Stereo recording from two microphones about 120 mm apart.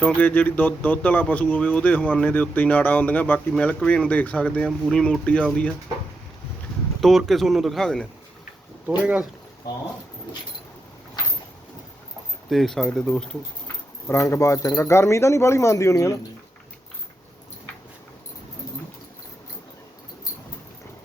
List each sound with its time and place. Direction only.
0.0 s speech: 10° left (ahead or behind)
7.0 s speech: centre (ahead or behind)
12.5 s speech: centre (ahead or behind)
14.1 s speech: 25° left (ahead or behind)